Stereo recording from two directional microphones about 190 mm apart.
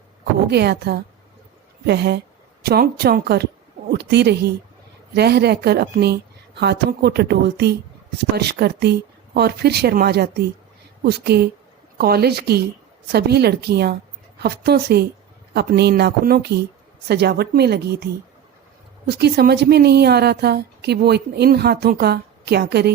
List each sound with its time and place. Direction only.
0.4 s a woman's voice: 60° right (ahead or behind)